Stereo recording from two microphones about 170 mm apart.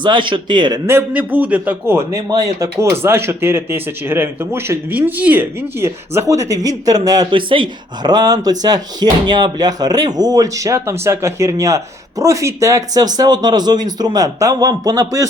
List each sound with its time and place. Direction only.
0.0 s speech: 30° right (ahead or behind)
0.9 s a man's voice: 10° right (ahead or behind)